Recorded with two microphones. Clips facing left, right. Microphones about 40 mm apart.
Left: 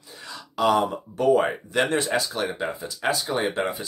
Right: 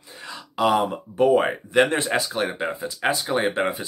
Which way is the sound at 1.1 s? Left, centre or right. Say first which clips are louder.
Right 2 dB; right.